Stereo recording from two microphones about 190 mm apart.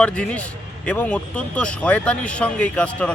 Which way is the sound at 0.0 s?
5° left (ahead or behind).